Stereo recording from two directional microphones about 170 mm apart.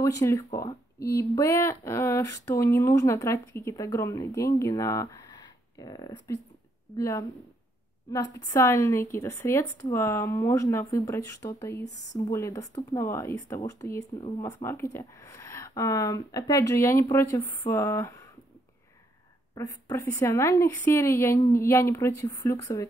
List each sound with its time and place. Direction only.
0.0 s speech: 15° left (ahead or behind)
19.5 s speech: 20° left (ahead or behind)